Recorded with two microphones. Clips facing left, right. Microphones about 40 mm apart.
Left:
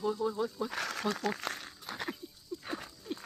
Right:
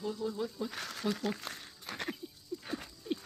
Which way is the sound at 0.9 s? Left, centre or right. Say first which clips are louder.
Right 1 dB; left.